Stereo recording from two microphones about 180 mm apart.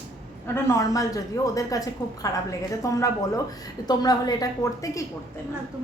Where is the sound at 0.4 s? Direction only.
15° left (ahead or behind).